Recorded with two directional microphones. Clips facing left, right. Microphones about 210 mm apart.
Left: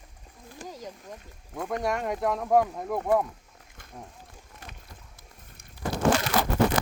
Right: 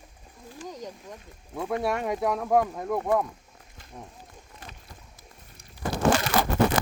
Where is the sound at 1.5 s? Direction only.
5° right (ahead or behind).